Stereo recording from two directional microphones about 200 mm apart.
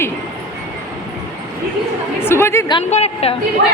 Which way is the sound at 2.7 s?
30° left (ahead or behind).